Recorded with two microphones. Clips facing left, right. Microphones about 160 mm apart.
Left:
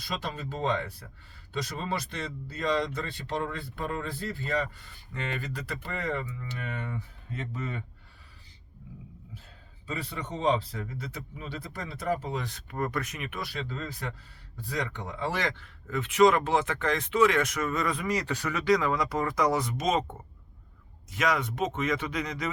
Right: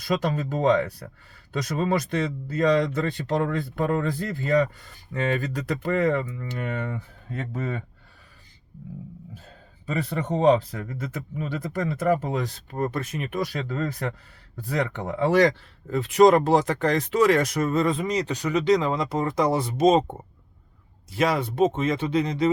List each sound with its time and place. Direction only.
0.0 s speech: 50° right (ahead or behind)
5.4 s speech: 45° right (ahead or behind)
6.7 s speech: 45° right (ahead or behind)
7.3 s speech: 55° right (ahead or behind)
9.8 s speech: 50° right (ahead or behind)
12.5 s speech: 30° right (ahead or behind); by 15.3 s 60° right (ahead or behind)
15.3 s speech: 40° right (ahead or behind)
21.1 s speech: 30° right (ahead or behind)